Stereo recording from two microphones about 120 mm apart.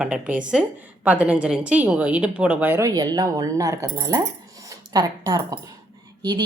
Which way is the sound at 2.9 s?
35° right (ahead or behind).